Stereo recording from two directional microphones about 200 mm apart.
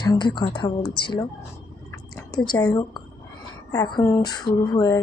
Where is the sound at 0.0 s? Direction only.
20° left (ahead or behind).